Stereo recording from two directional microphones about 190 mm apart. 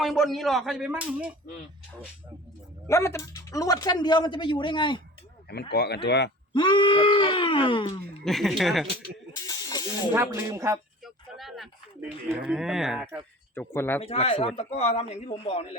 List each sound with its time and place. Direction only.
0.0 s speech: centre (ahead or behind)
2.8 s speech: 15° left (ahead or behind)
5.7 s speech: 60° left (ahead or behind)
6.5 s speech: 25° left (ahead or behind)
8.2 s speech: centre (ahead or behind)
9.3 s snake: 20° left (ahead or behind)
10.1 s speech: 15° right (ahead or behind)
11.0 s a sound: centre (ahead or behind)
12.5 s speech: centre (ahead or behind)
13.5 s speech: 10° left (ahead or behind)
14.0 s a man's voice: 35° left (ahead or behind)